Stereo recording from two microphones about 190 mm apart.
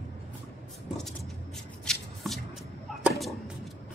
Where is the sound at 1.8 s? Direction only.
Centre (ahead or behind).